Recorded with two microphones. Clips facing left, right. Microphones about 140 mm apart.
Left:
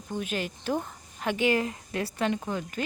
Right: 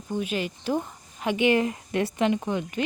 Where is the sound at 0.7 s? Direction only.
10° right (ahead or behind).